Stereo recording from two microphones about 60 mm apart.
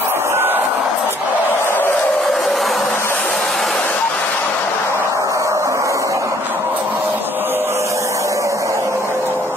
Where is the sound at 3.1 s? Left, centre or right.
Centre.